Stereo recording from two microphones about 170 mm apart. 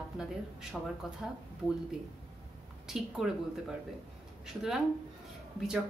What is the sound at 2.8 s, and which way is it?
Speech, centre (ahead or behind).